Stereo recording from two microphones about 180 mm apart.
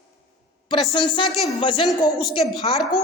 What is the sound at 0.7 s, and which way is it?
A woman's voice, 25° left (ahead or behind).